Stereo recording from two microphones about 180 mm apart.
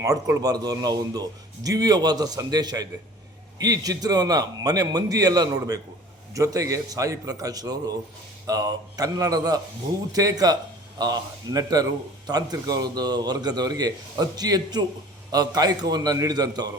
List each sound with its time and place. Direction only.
0.0 s a man's voice: 20° right (ahead or behind)